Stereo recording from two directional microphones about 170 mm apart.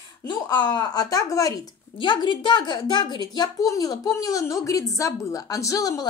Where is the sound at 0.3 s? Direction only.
25° left (ahead or behind).